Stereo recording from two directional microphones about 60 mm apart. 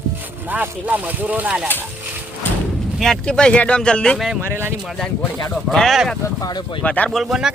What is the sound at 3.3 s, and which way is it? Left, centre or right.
Speech, centre.